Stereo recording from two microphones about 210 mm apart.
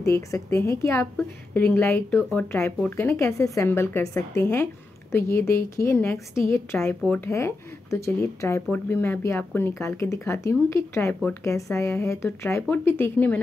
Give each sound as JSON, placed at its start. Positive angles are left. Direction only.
{"t": 0.0, "sound": "a woman's voice", "side_deg": 15}